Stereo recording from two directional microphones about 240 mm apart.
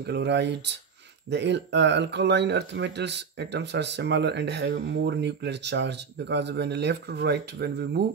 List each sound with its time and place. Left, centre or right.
0.0 s speech: right